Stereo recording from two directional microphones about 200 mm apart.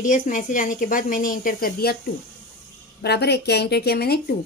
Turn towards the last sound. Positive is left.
turn(degrees=50)  # may be behind; listen again after turning